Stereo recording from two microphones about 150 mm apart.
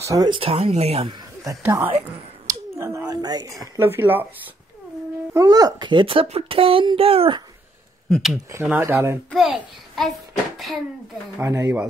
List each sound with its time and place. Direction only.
0.0 s speech: 20° right (ahead or behind)
0.3 s a child's voice: 40° right (ahead or behind)
1.4 s speech: 20° right (ahead or behind)
2.4 s a sound: 20° right (ahead or behind)
5.3 s a child's voice: 25° right (ahead or behind)
8.1 s a child's voice: centre (ahead or behind)
8.6 s speech: 15° right (ahead or behind)
9.3 s a child's voice: centre (ahead or behind)
11.3 s speech: 20° right (ahead or behind)